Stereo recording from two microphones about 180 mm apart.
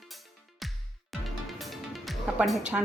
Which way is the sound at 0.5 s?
Centre (ahead or behind).